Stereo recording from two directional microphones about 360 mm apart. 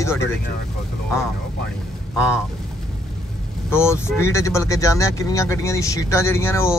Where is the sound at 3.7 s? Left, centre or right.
Centre.